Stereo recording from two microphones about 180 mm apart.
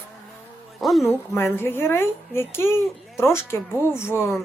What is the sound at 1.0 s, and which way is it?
Speech, 15° left (ahead or behind).